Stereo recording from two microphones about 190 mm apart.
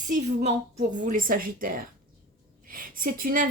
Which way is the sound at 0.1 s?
35° right (ahead or behind).